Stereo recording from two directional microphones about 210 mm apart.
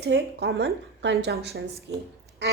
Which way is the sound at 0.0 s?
50° right (ahead or behind).